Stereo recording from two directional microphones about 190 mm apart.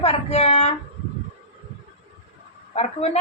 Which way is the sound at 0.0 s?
35° left (ahead or behind).